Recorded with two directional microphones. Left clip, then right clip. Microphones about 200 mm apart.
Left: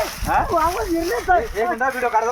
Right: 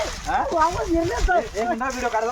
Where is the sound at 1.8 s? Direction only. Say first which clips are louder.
Left 5 dB; 5° left (ahead or behind).